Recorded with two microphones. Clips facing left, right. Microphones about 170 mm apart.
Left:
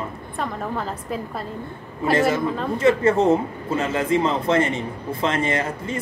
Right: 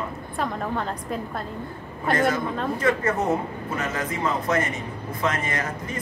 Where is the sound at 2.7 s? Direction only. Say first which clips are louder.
Left 7 dB; 25° left (ahead or behind).